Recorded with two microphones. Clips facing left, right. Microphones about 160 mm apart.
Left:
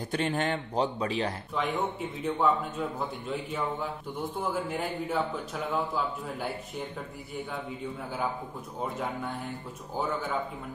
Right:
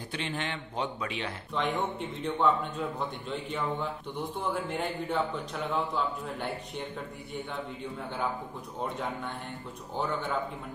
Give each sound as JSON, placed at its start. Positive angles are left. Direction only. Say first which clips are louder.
{"t": 0.1, "sound": "speech", "louder": "left 6 dB", "side_deg": 45}
{"t": 1.5, "sound": "a man's voice", "louder": "right 4 dB", "side_deg": 5}
{"t": 8.8, "sound": "a man's voice", "louder": "left 1 dB", "side_deg": 0}